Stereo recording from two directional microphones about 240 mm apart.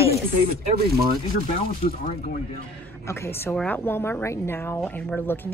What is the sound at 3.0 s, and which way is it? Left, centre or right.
A woman's voice, centre.